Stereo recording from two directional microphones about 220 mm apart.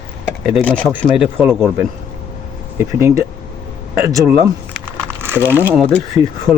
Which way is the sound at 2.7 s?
10° right (ahead or behind).